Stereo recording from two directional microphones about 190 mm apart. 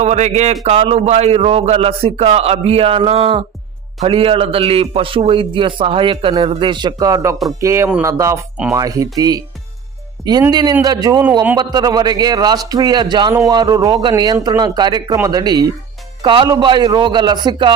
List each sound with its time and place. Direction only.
0.0 s a man's voice: 35° right (ahead or behind); by 9.4 s 20° right (ahead or behind)
10.5 s a man's voice: 20° right (ahead or behind)